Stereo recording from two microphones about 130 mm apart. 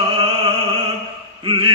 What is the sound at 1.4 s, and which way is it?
Mantra, 45° right (ahead or behind).